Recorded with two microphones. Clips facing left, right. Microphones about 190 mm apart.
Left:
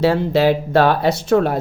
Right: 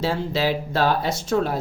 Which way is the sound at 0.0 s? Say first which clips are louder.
Left 8 dB; 60° left (ahead or behind).